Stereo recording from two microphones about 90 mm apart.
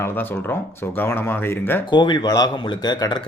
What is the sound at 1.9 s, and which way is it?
Speech, 55° left (ahead or behind).